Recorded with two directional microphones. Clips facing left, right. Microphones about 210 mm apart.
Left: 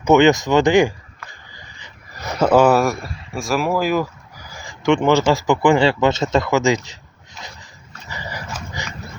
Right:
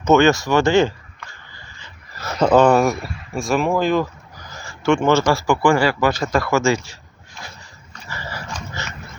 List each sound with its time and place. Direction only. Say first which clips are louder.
0.0 s speech: left 1 dB; 15° left (ahead or behind)
8.0 s dog: left 1 dB; 15° left (ahead or behind)